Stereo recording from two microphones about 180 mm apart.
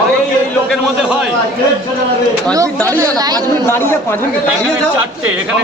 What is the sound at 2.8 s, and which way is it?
Speech, 20° right (ahead or behind).